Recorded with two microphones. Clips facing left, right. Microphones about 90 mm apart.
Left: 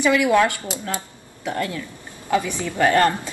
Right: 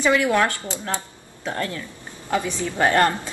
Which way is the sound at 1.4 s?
35° right (ahead or behind).